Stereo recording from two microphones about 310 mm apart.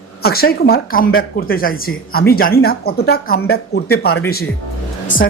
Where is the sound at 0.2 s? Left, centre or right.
Left.